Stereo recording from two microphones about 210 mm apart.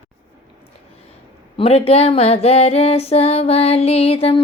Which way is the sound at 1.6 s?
30° left (ahead or behind).